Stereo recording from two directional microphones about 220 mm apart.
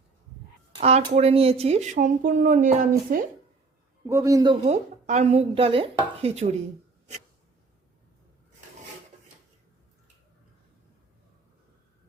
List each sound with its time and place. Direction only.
0.7 s speech: 30° right (ahead or behind)
4.0 s a man's voice: 15° right (ahead or behind)
4.6 s speech: 30° right (ahead or behind)